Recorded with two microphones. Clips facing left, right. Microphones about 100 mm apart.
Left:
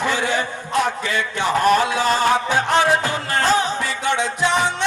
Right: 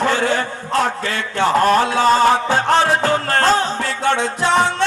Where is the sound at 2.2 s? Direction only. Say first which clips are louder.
Right 3 dB; 15° left (ahead or behind).